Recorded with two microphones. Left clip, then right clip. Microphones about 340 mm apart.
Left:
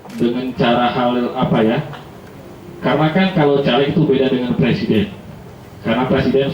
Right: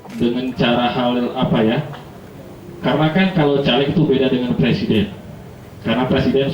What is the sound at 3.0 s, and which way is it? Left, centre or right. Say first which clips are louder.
Speech: left 1 dB; centre.